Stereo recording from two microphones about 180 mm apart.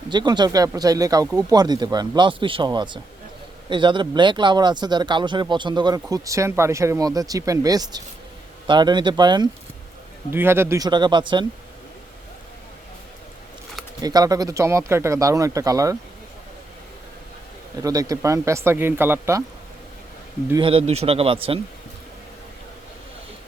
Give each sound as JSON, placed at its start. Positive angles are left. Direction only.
{"t": 0.1, "sound": "speech", "side_deg": -25}
{"t": 10.3, "sound": "speech", "side_deg": -15}
{"t": 14.0, "sound": "speech", "side_deg": -20}
{"t": 17.8, "sound": "speech", "side_deg": -20}
{"t": 20.6, "sound": "speech", "side_deg": -30}